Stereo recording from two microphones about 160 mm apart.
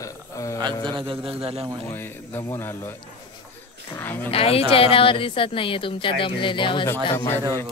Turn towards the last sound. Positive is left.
turn(degrees=15)  # may be behind; listen again after turning